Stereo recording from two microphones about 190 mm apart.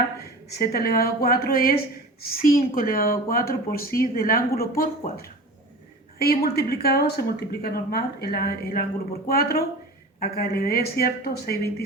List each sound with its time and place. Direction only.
0.6 s speech: 55° left (ahead or behind)